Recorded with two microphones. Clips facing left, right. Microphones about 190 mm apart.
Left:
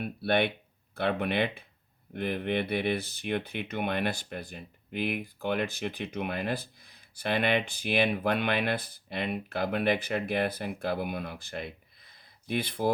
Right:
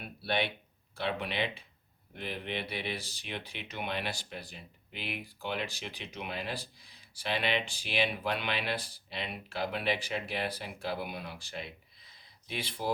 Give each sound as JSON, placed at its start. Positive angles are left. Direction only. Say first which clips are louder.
{"t": 0.0, "sound": "speech", "louder": "left 6 dB", "side_deg": 55}